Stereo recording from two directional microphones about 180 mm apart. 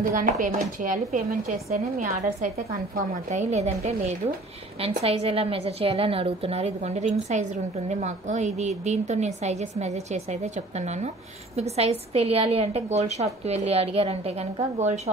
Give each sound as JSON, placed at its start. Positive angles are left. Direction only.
{"t": 0.0, "sound": "speech", "side_deg": -50}
{"t": 3.0, "sound": "a woman's voice", "side_deg": -40}